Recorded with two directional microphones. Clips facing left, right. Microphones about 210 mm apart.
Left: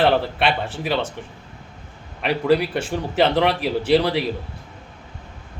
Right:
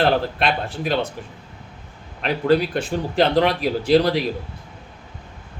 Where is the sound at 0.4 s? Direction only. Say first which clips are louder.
Even; 5° left (ahead or behind).